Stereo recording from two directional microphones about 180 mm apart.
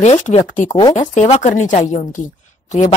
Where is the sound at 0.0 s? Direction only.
40° left (ahead or behind).